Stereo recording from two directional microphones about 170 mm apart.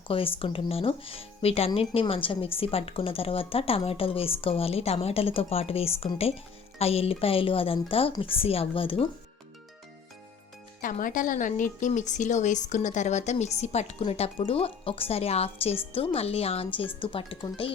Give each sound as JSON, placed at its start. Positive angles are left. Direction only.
{"t": 0.1, "sound": "speech", "side_deg": 30}
{"t": 10.8, "sound": "speech", "side_deg": 50}